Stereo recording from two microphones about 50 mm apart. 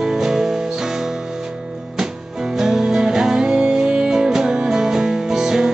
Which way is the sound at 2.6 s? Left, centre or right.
Centre.